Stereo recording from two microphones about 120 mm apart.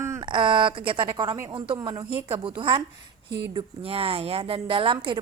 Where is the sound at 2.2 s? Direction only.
45° right (ahead or behind).